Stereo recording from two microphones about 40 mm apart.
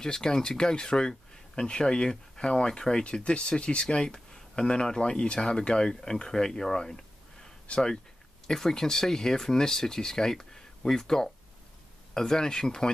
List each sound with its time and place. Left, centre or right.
0.0 s speech: centre